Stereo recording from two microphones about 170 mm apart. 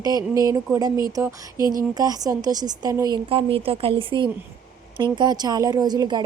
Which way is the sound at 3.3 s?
35° right (ahead or behind).